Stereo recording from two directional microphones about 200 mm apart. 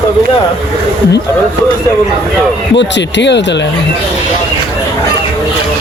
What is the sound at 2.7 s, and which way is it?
Speech, 60° left (ahead or behind).